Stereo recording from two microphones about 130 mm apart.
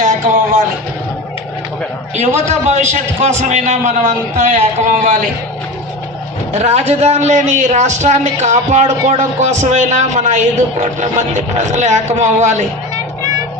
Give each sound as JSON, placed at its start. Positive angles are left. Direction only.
{"t": 2.1, "sound": "speech", "side_deg": -65}
{"t": 6.5, "sound": "speech", "side_deg": -60}